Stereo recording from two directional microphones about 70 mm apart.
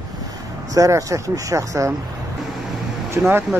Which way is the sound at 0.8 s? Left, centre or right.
Right.